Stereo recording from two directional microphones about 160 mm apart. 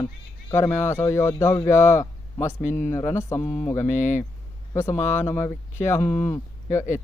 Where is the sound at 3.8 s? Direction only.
50° left (ahead or behind).